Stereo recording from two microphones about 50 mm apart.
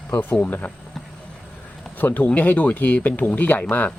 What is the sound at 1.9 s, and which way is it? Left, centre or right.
Speech, left.